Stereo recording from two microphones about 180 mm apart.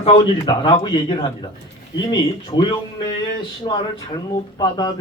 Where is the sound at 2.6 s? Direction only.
25° left (ahead or behind).